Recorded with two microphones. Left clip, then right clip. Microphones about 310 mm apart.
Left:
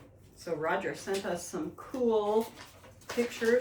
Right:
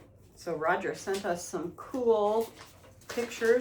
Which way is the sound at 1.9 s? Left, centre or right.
Centre.